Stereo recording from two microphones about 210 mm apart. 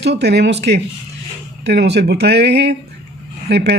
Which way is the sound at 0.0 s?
55° right (ahead or behind).